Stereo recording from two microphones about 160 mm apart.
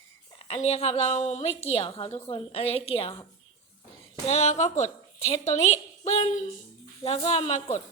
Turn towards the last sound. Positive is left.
turn(degrees=45)  # may be behind; listen again after turning